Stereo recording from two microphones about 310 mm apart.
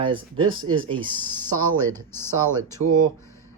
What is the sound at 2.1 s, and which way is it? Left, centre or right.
Speech, centre.